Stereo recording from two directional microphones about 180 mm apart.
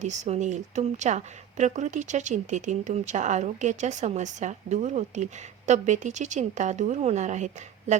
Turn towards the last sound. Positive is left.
turn(degrees=-40)  # may be behind; listen again after turning